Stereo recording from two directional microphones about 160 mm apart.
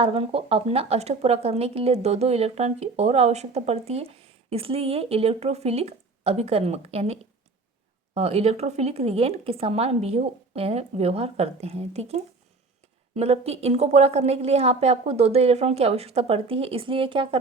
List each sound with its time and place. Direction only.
0.0 s speech: 35° right (ahead or behind)